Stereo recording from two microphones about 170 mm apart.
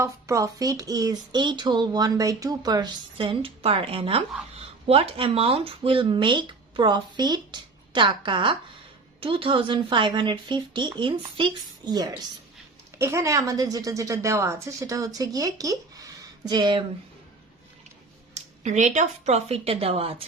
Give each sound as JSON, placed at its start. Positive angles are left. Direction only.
{"t": 0.0, "sound": "speech", "side_deg": -20}
{"t": 18.3, "sound": "speech", "side_deg": -45}